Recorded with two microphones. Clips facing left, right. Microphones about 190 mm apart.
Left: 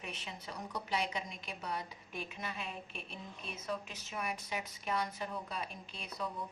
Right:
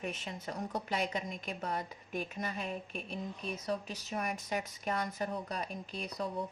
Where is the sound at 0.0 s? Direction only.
45° right (ahead or behind).